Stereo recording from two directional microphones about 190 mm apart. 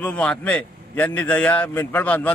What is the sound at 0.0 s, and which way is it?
A man's voice, 5° left (ahead or behind).